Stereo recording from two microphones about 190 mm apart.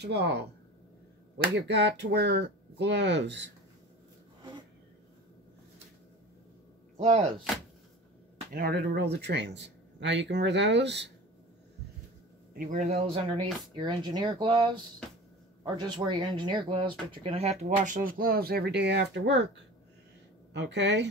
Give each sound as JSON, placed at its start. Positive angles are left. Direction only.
{"t": 0.0, "sound": "speech", "side_deg": -60}
{"t": 7.0, "sound": "a man's voice", "side_deg": -35}
{"t": 8.5, "sound": "speech", "side_deg": -55}
{"t": 12.5, "sound": "a man's voice", "side_deg": -40}
{"t": 13.3, "sound": "speech", "side_deg": -25}
{"t": 20.5, "sound": "speech", "side_deg": -70}